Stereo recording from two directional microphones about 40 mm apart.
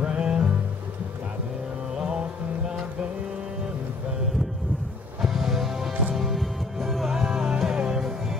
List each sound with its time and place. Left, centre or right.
0.0 s music: right
2.0 s music: centre
5.2 s music: centre